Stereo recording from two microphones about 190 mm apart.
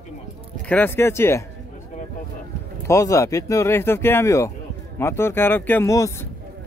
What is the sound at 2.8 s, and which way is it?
Speech, 15° left (ahead or behind).